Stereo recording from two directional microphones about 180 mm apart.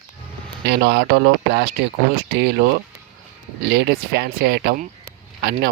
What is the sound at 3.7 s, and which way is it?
Speech, 65° right (ahead or behind).